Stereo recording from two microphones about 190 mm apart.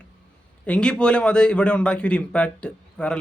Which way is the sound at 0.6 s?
5° left (ahead or behind).